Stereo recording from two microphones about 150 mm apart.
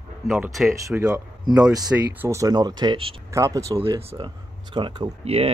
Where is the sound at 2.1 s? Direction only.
20° right (ahead or behind).